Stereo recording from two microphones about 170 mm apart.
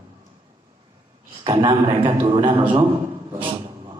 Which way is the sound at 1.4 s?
30° right (ahead or behind).